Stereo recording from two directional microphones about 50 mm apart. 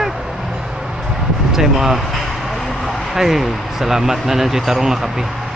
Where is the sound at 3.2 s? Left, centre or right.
Centre.